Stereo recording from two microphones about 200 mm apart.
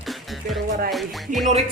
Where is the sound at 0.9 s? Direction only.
Centre (ahead or behind).